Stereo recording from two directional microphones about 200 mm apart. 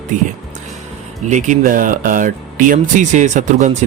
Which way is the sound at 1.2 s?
35° right (ahead or behind).